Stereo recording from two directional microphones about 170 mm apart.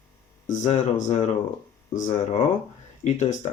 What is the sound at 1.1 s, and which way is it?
Speech, 45° left (ahead or behind).